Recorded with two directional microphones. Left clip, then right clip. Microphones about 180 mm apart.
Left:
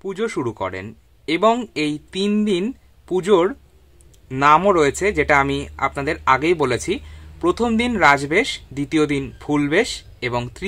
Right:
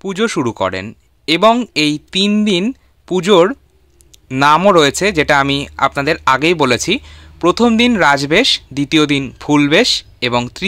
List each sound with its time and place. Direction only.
0.0 s speech: 25° right (ahead or behind)